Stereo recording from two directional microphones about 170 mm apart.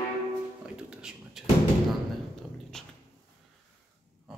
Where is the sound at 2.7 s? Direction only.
5° left (ahead or behind).